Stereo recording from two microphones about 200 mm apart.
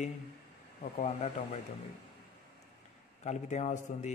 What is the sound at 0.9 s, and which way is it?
Speech, 35° left (ahead or behind).